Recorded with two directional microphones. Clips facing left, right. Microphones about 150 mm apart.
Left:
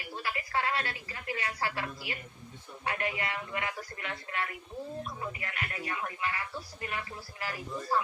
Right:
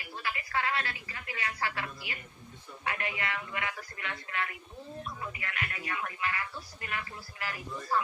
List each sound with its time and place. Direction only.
0.2 s speech: 35° left (ahead or behind)